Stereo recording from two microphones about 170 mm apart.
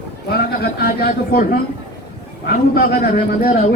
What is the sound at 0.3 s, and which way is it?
A man's voice, 65° left (ahead or behind).